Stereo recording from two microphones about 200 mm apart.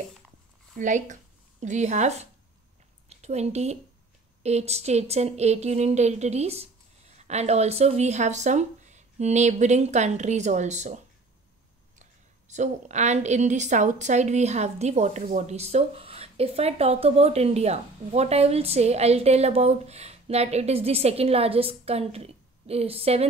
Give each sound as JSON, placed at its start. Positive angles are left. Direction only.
{"t": 0.7, "sound": "a woman's voice", "side_deg": -40}
{"t": 12.0, "sound": "a woman's voice", "side_deg": -35}